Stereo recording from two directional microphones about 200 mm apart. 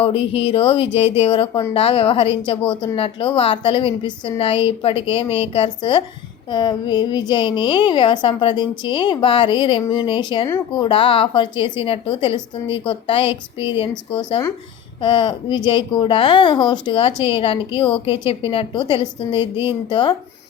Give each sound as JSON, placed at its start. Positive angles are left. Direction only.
{"t": 0.0, "sound": "a woman's voice", "side_deg": 30}